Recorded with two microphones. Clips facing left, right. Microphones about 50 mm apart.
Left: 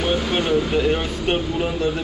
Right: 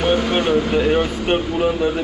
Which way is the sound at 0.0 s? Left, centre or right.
Right.